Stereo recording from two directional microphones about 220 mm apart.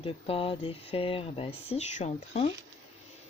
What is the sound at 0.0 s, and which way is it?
Speech, 25° left (ahead or behind).